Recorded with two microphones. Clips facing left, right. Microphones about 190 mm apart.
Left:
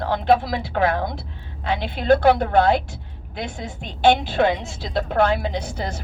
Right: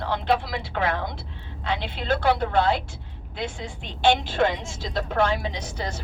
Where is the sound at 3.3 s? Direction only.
45° left (ahead or behind).